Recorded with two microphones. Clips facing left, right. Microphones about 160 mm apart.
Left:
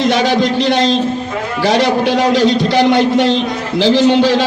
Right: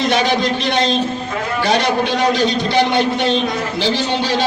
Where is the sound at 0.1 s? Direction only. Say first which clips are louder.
Left 3 dB; 90° left.